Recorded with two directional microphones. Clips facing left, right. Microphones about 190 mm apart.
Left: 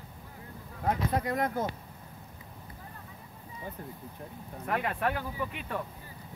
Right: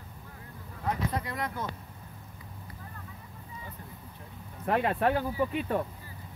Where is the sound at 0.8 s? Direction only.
45° left (ahead or behind).